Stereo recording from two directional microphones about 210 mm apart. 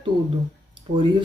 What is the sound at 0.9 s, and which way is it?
Speech, 20° right (ahead or behind).